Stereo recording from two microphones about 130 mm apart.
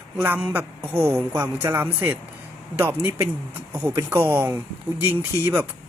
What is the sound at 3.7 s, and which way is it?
Speech, 25° right (ahead or behind).